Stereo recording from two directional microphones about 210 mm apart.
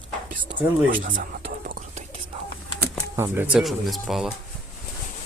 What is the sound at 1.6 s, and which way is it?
Whispering, 40° right (ahead or behind).